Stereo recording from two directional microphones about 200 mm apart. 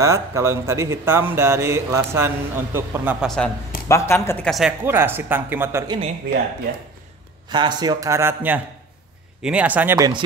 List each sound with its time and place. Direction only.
0.0 s a man's voice: 15° right (ahead or behind)
3.3 s speech: 5° left (ahead or behind)
3.9 s speech: 15° left (ahead or behind)
4.5 s a man's voice: centre (ahead or behind)
7.4 s a man's voice: 20° right (ahead or behind)